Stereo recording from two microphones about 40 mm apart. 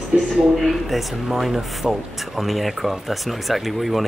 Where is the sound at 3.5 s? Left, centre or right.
Centre.